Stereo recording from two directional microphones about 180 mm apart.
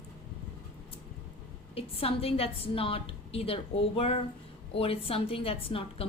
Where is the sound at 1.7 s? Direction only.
30° left (ahead or behind).